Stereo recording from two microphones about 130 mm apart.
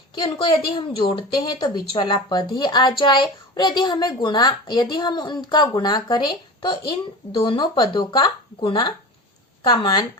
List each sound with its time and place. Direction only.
0.2 s a woman's voice: 40° left (ahead or behind)